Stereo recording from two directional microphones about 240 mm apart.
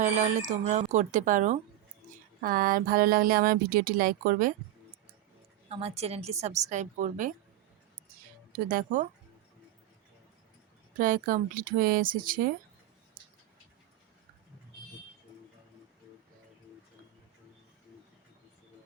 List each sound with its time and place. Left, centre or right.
0.0 s speech: right
5.6 s a woman's voice: right
8.5 s speech: right
10.9 s speech: right